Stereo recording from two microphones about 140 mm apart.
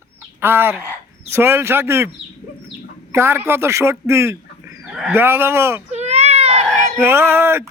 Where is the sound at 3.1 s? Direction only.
20° right (ahead or behind).